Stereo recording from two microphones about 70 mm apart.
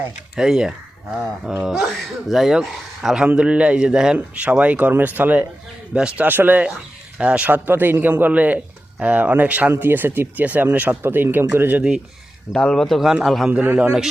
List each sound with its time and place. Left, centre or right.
0.3 s speech: centre
3.2 s a man's voice: centre
6.2 s a man's voice: right
12.5 s speech: centre
13.5 s a man's voice: right